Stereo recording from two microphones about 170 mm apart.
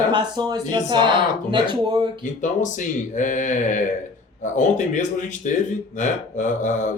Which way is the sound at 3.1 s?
50° left (ahead or behind).